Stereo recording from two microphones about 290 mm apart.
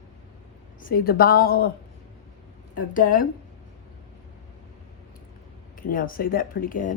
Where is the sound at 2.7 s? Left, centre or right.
Left.